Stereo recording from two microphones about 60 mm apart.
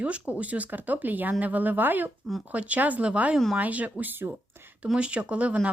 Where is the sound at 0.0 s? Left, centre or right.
Right.